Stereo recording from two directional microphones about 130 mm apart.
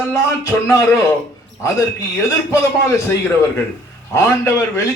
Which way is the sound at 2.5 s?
25° left (ahead or behind).